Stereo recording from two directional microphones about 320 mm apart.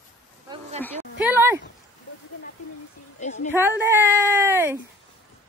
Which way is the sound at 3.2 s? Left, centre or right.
Left.